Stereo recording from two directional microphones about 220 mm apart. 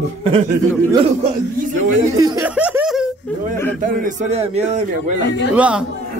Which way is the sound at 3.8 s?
40° right (ahead or behind).